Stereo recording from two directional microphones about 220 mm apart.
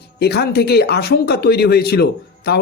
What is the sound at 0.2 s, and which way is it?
Speech, 45° left (ahead or behind).